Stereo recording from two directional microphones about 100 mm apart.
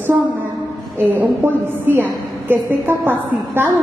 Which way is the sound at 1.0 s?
20° right (ahead or behind).